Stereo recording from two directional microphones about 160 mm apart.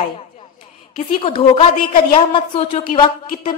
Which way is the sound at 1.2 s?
35° left (ahead or behind).